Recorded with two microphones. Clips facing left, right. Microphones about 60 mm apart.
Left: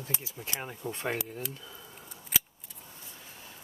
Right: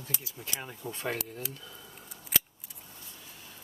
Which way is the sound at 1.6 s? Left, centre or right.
Centre.